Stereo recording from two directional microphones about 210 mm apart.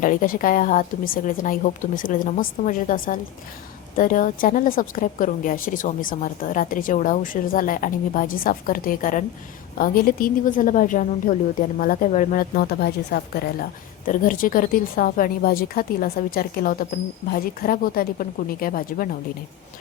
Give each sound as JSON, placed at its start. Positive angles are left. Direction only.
{"t": 0.0, "sound": "a woman's voice", "side_deg": 40}